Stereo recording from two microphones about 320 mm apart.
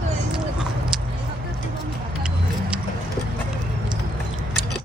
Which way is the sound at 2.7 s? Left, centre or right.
Centre.